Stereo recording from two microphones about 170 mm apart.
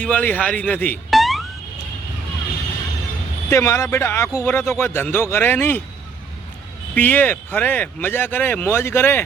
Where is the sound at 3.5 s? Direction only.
15° left (ahead or behind).